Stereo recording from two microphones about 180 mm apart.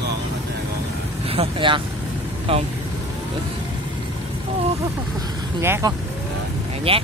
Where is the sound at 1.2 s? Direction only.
30° right (ahead or behind).